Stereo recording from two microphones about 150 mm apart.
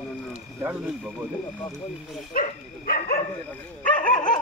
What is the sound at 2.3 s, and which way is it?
Dog, 65° left (ahead or behind).